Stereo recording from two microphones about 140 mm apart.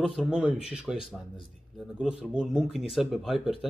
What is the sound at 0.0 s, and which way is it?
Speech, centre (ahead or behind).